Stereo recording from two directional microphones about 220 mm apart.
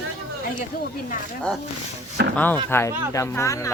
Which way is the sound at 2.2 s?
50° right (ahead or behind).